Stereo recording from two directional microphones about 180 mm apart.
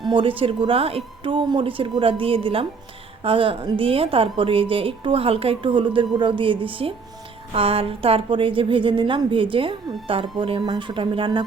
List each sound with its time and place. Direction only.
0.0 s a woman's voice: 30° right (ahead or behind)